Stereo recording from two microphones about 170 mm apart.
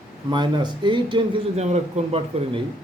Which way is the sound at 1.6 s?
40° right (ahead or behind).